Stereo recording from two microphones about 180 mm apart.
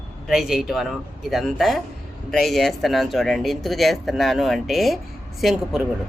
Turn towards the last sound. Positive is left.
turn(degrees=0)  # may be behind; listen again after turning